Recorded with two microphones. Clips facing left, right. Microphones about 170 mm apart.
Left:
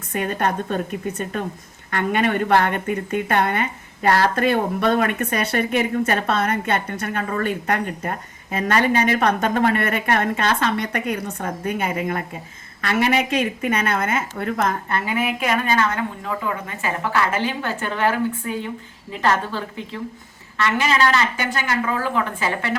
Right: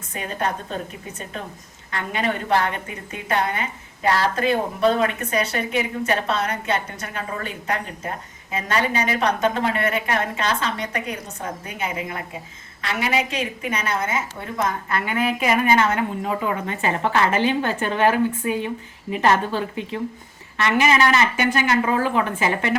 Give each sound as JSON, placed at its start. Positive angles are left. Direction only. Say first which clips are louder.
{"t": 0.1, "sound": "a woman's voice", "louder": "left 4 dB", "side_deg": 60}
{"t": 1.9, "sound": "a woman's voice", "louder": "left 5 dB", "side_deg": 60}
{"t": 15.4, "sound": "speech", "louder": "right 2 dB", "side_deg": -10}
{"t": 15.7, "sound": "a woman's voice", "louder": "right 2 dB", "side_deg": -20}